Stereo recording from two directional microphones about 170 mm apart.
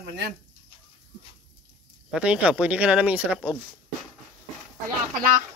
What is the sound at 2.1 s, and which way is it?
Speech, 5° right (ahead or behind).